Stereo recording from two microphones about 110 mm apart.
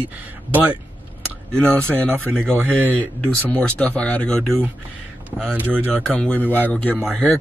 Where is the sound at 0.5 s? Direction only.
15° right (ahead or behind).